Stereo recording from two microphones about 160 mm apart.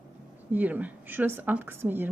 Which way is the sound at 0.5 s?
10° right (ahead or behind).